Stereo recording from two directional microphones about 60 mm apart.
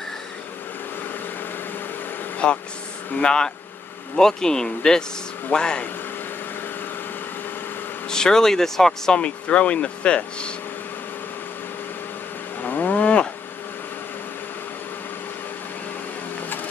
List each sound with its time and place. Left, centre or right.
2.3 s vehicle: centre
3.2 s speech: centre
8.1 s speech: centre
12.6 s cattle: left